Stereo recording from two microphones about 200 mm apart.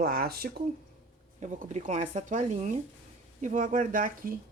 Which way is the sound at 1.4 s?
40° right (ahead or behind).